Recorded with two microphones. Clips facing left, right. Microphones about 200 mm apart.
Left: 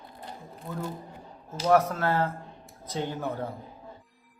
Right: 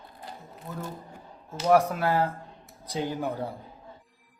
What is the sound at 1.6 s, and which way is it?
Speech, 10° right (ahead or behind).